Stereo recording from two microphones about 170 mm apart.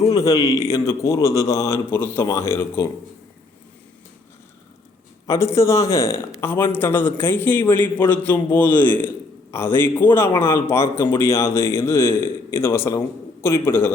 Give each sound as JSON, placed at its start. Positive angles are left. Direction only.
{"t": 0.1, "sound": "a man's voice", "side_deg": 20}
{"t": 5.2, "sound": "speech", "side_deg": 15}